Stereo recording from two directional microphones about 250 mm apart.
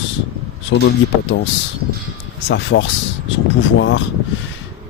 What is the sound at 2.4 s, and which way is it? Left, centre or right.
Speech, left.